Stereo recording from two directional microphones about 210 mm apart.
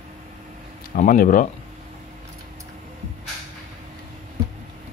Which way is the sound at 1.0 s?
40° left (ahead or behind).